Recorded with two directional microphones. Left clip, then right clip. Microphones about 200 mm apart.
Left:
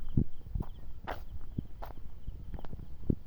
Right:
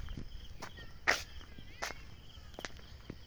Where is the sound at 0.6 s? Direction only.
35° right (ahead or behind).